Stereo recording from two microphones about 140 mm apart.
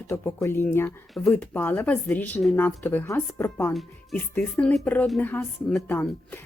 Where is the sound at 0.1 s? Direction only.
20° left (ahead or behind).